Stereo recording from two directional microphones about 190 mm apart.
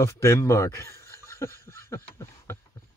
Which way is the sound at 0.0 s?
15° left (ahead or behind).